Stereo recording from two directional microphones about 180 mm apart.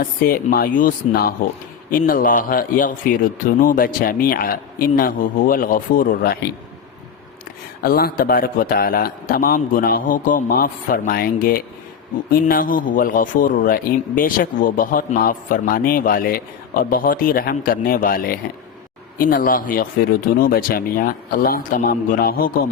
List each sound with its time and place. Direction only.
0.0 s a man's voice: 55° left (ahead or behind)
7.8 s a man's voice: 55° left (ahead or behind)